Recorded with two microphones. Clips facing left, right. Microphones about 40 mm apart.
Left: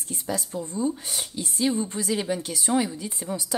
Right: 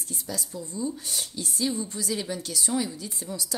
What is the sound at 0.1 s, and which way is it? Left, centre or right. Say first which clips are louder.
A woman's voice: left 6 dB; left.